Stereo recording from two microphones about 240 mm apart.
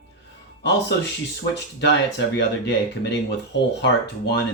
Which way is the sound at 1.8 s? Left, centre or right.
Left.